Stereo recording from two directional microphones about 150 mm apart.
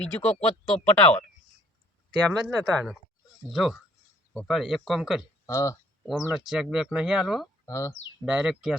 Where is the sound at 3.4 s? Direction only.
Centre (ahead or behind).